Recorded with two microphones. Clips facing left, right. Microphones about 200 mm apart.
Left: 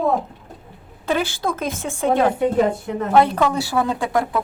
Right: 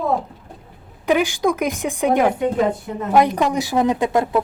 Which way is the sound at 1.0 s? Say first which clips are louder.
Right 4 dB; 15° right (ahead or behind).